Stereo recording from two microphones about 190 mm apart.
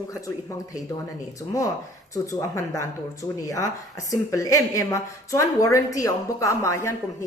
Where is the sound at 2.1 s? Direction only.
15° left (ahead or behind).